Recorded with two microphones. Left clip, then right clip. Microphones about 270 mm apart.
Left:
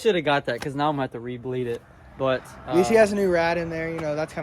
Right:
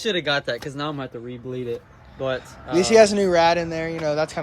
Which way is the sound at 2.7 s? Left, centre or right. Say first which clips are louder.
Right 3 dB; centre.